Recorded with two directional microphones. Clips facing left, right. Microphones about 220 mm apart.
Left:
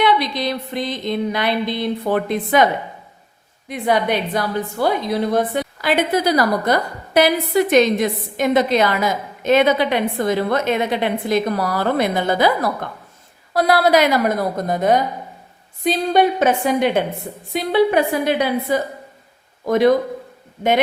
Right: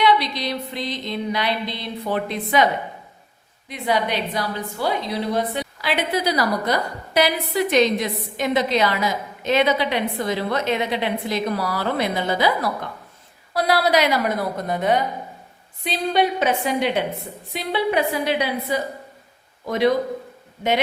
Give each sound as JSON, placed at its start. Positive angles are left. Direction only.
{"t": 0.0, "sound": "a woman's voice", "side_deg": 50}
{"t": 3.7, "sound": "a woman's voice", "side_deg": 50}